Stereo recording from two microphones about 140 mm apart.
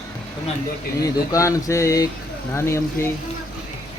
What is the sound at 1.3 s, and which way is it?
A man's voice, 25° left (ahead or behind).